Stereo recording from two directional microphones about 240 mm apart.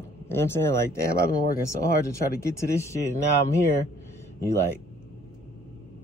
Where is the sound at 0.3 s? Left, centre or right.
Centre.